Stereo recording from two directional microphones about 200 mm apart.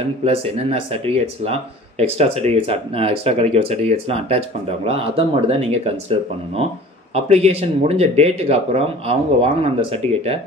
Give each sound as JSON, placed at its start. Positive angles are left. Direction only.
{"t": 0.2, "sound": "speech", "side_deg": -30}